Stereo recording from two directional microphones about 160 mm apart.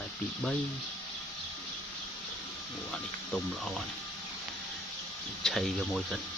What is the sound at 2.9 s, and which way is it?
Speech, centre (ahead or behind).